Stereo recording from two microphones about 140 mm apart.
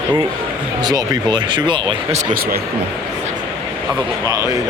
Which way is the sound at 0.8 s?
30° right (ahead or behind).